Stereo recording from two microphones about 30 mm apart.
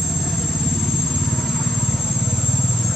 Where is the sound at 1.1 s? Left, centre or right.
Left.